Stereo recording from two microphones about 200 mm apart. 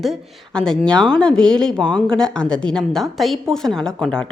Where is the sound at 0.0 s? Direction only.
Centre (ahead or behind).